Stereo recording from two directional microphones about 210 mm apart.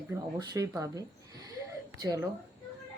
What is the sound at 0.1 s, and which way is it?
Speech, 15° right (ahead or behind).